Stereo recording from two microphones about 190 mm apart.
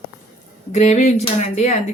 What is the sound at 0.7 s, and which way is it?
Speech, 35° left (ahead or behind).